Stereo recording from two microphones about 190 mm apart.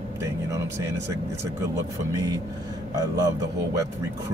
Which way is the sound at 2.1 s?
20° right (ahead or behind).